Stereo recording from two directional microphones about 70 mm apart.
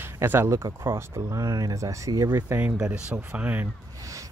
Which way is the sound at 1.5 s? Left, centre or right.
Right.